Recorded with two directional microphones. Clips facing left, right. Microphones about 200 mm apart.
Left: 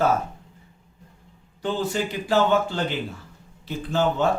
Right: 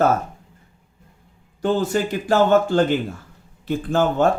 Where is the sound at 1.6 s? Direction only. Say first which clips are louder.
Right 5 dB; 45° right (ahead or behind).